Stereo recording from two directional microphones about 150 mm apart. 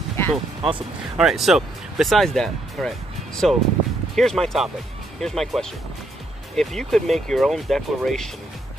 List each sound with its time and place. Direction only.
0.3 s speech: 35° right (ahead or behind)
1.1 s speech: 5° right (ahead or behind)